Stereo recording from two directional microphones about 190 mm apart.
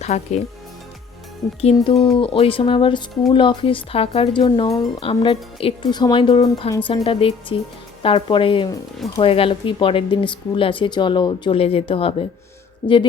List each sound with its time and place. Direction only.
0.0 s speech: 35° left (ahead or behind)
1.6 s speech: 30° left (ahead or behind)